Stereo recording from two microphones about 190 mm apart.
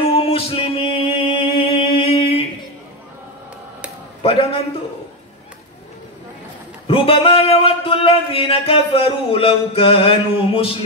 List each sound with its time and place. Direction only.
0.0 s music: 30° left (ahead or behind)
4.2 s a man's voice: 30° left (ahead or behind)
6.9 s a sound: 30° left (ahead or behind)